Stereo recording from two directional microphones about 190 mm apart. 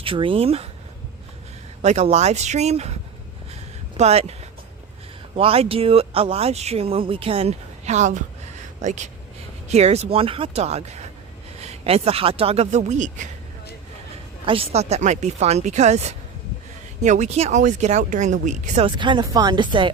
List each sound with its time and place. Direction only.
0.0 s speech: 30° right (ahead or behind)
1.8 s speech: 35° right (ahead or behind)
3.5 s a sound: 35° right (ahead or behind)
5.3 s speech: 30° right (ahead or behind)
14.4 s speech: 30° right (ahead or behind)
18.9 s speech: 25° right (ahead or behind)